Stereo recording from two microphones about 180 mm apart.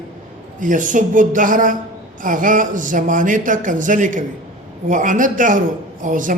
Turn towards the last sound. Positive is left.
turn(degrees=-45)  # may be behind; listen again after turning